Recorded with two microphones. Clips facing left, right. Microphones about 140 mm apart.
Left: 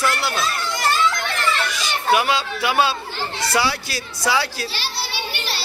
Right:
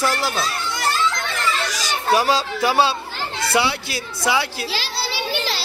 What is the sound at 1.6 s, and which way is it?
Speech, 35° right (ahead or behind).